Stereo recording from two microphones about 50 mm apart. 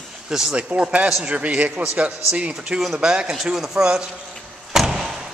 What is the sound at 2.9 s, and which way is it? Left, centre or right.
Speech, centre.